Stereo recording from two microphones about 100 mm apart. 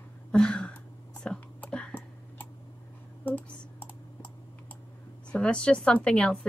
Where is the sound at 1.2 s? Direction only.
10° left (ahead or behind).